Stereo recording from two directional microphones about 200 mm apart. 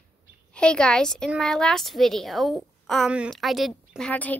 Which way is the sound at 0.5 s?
5° left (ahead or behind).